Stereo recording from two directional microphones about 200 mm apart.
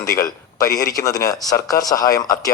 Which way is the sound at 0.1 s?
15° left (ahead or behind).